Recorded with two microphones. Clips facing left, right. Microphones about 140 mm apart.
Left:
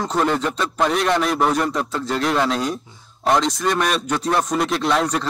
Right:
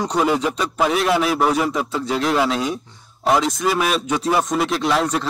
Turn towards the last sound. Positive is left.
turn(degrees=0)  # may be behind; listen again after turning